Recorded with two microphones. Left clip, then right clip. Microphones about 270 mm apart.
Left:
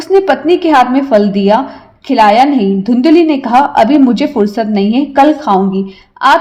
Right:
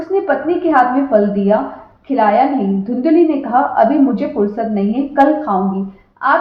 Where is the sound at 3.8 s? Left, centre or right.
Left.